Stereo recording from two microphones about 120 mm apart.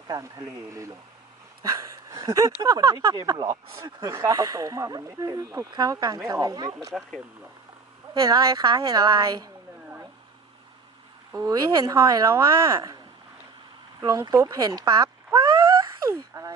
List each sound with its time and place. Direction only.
0.1 s speech: 25° right (ahead or behind)
6.9 s speech: 5° left (ahead or behind)
8.1 s a woman's voice: 30° right (ahead or behind)
11.3 s speech: 25° right (ahead or behind)
14.0 s a woman's voice: 30° right (ahead or behind)
16.1 s a sound: 25° right (ahead or behind)